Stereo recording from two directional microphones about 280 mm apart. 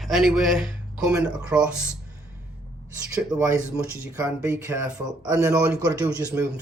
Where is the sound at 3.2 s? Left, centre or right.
Centre.